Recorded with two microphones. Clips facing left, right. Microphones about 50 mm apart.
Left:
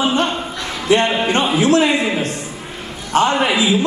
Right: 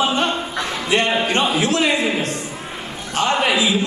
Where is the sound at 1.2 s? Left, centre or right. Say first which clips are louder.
Left 3 dB; left.